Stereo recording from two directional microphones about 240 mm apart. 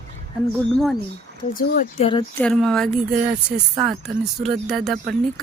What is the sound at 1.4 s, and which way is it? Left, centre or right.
Speech, left.